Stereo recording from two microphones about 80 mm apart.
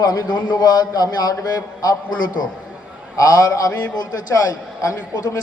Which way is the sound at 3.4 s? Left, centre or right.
Left.